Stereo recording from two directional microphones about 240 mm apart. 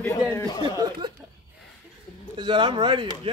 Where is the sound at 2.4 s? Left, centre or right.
Centre.